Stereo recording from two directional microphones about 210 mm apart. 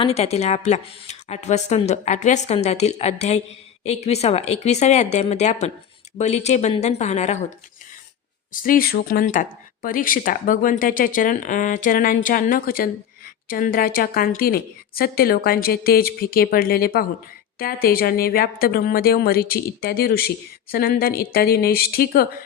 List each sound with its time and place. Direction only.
0.0 s speech: 30° left (ahead or behind)
8.5 s speech: 40° left (ahead or behind)